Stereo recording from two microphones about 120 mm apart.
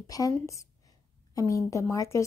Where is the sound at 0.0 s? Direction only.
30° left (ahead or behind).